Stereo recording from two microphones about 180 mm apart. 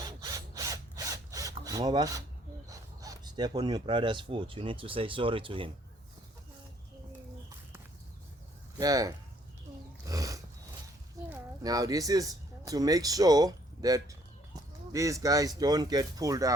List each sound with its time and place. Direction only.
0.0 s wood: 20° right (ahead or behind)
2.6 s speech: 20° right (ahead or behind)
8.8 s speech: 20° right (ahead or behind)
10.1 s a sound: 20° right (ahead or behind)
11.6 s speech: 20° right (ahead or behind)